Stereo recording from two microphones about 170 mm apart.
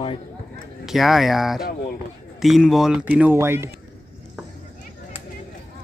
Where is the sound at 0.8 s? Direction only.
Centre (ahead or behind).